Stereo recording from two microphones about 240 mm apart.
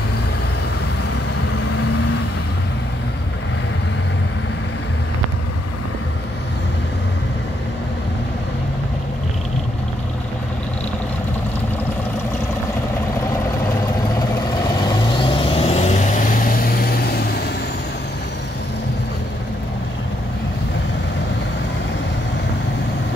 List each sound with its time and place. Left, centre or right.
15.0 s vehicle: centre; by 17.4 s left